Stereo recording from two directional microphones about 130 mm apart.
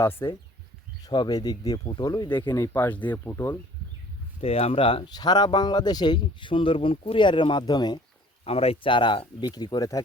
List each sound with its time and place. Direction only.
0.0 s speech: 20° left (ahead or behind)
1.0 s speech: 30° left (ahead or behind)
2.6 s speech: 15° left (ahead or behind)
4.4 s speech: 50° left (ahead or behind); by 7.9 s 35° left (ahead or behind)
8.4 s speech: 50° left (ahead or behind); by 10.0 s 30° left (ahead or behind)